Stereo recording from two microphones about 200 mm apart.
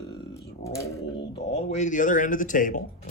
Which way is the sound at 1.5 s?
35° left (ahead or behind).